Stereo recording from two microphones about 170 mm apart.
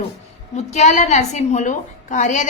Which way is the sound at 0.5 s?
40° left (ahead or behind).